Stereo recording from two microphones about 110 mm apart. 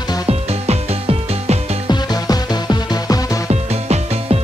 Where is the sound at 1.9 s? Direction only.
40° left (ahead or behind).